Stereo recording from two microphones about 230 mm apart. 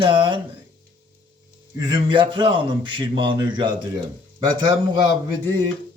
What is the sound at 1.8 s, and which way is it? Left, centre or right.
Speech, centre.